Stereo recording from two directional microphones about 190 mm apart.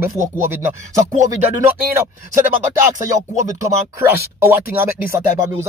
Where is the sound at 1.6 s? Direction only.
15° right (ahead or behind).